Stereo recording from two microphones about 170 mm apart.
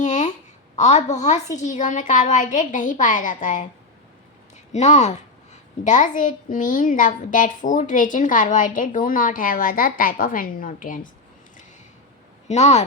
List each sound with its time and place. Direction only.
0.0 s a sound: 45° left (ahead or behind)
0.8 s a woman's voice: 40° left (ahead or behind)
12.5 s speech: 40° left (ahead or behind)